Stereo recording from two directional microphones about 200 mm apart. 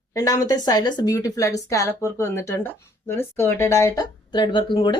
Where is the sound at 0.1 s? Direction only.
15° left (ahead or behind).